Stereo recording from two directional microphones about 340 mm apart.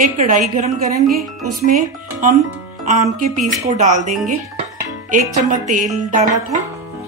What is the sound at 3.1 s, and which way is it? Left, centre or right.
Music, right.